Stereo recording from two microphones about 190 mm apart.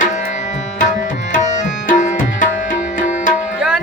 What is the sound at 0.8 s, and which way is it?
Tabla, 40° left (ahead or behind).